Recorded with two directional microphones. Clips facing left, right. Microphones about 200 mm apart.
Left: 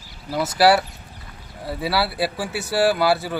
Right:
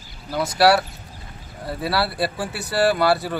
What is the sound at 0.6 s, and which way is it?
Speech, centre (ahead or behind).